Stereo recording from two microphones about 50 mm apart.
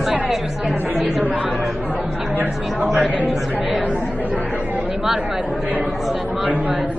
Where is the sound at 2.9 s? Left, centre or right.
Right.